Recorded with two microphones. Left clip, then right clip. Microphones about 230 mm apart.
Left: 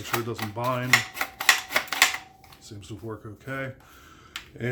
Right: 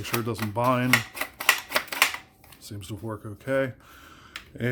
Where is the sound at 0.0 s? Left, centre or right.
Right.